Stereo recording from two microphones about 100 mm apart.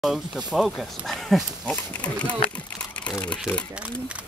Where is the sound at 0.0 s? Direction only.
5° right (ahead or behind).